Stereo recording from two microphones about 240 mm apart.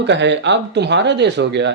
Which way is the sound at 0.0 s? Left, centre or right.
Right.